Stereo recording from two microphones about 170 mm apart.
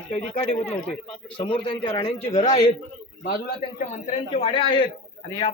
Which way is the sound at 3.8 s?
40° left (ahead or behind).